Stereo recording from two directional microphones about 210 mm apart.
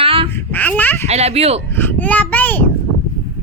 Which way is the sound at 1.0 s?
30° right (ahead or behind).